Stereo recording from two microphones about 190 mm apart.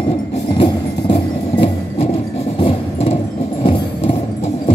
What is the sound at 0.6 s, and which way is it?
Music, 25° left (ahead or behind).